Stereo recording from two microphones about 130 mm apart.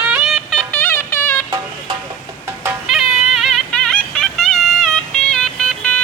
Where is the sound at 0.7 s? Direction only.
15° left (ahead or behind).